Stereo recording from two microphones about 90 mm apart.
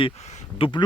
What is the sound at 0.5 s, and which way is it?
Speech, 85° left.